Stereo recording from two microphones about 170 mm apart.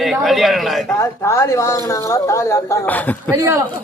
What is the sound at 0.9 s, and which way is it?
A woman's voice, 15° left (ahead or behind).